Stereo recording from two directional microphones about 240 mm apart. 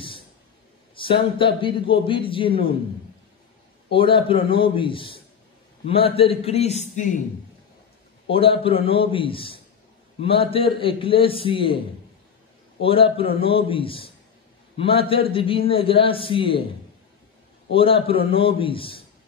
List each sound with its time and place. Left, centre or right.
0.9 s a man's voice: left
3.9 s a man's voice: left
8.3 s a man's voice: left
12.8 s a man's voice: left
17.7 s a man's voice: left